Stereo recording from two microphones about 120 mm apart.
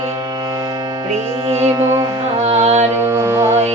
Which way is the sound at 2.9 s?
20° right (ahead or behind).